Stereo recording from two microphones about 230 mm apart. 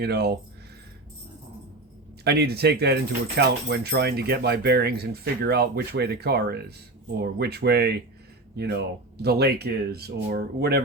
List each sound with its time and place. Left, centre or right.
0.0 s speech: right
2.2 s speech: right